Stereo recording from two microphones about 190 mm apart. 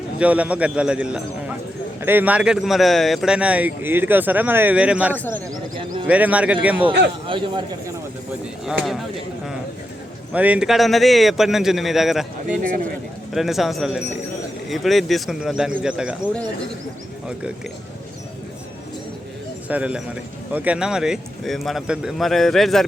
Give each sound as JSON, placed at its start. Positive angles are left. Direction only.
{"t": 0.2, "sound": "speech", "side_deg": -5}
{"t": 5.1, "sound": "speech", "side_deg": 10}
{"t": 6.1, "sound": "speech", "side_deg": -5}
{"t": 7.3, "sound": "a man's voice", "side_deg": -25}
{"t": 8.6, "sound": "speech", "side_deg": 0}
{"t": 10.3, "sound": "speech", "side_deg": -5}
{"t": 19.6, "sound": "speech", "side_deg": -5}